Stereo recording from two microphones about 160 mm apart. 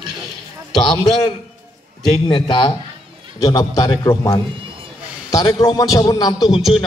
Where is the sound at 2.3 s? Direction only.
30° left (ahead or behind).